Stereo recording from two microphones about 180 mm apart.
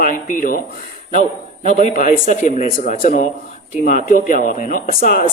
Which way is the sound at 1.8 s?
45° left (ahead or behind).